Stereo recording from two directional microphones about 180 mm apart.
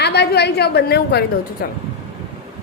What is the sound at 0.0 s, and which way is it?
A woman's voice, 65° left (ahead or behind).